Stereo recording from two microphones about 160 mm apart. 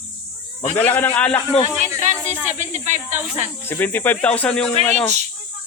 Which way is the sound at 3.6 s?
15° left (ahead or behind).